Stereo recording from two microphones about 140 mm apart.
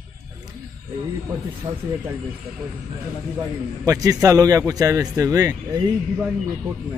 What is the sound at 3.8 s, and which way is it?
Speech, 25° right (ahead or behind).